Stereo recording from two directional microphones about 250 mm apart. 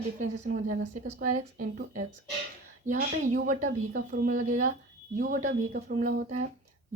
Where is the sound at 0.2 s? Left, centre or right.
Right.